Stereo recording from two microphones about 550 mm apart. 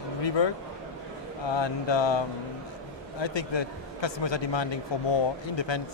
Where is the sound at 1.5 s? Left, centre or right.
Left.